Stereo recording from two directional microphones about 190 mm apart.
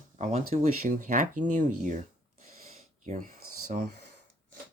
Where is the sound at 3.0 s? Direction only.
40° right (ahead or behind).